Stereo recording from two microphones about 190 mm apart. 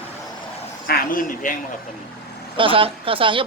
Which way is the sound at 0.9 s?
50° left (ahead or behind).